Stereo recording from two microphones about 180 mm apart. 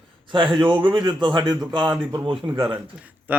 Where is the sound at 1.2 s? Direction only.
25° right (ahead or behind).